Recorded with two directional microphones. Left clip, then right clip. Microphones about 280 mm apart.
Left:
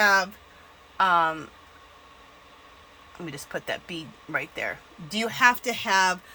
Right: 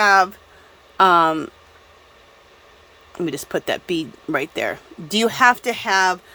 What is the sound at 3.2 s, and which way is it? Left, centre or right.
Speech, right.